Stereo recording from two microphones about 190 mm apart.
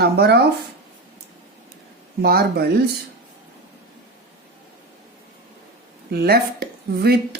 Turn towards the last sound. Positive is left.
turn(degrees=-55)  # may be behind; listen again after turning